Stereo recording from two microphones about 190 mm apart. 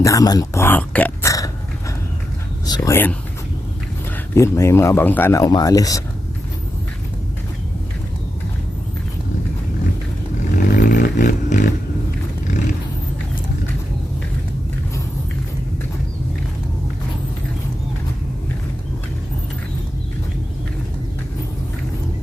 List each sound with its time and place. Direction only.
0.0 s speech: 20° left (ahead or behind)
2.6 s speech: 20° left (ahead or behind)
4.4 s speech: 15° left (ahead or behind)
10.5 s a sound: 45° left (ahead or behind)